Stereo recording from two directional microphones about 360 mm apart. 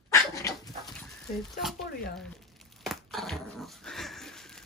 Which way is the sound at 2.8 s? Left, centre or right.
Centre.